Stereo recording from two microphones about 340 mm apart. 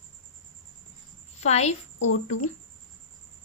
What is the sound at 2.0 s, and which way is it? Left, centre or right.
Speech, left.